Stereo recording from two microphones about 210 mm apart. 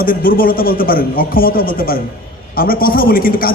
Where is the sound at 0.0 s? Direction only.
40° left (ahead or behind).